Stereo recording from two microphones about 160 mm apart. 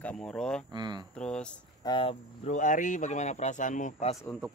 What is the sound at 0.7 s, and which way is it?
Speech, 25° right (ahead or behind).